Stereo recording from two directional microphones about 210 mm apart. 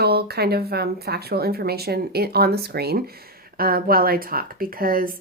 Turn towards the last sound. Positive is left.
turn(degrees=-45)  # may be behind; listen again after turning